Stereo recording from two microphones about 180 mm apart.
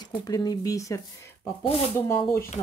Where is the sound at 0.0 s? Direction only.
20° left (ahead or behind).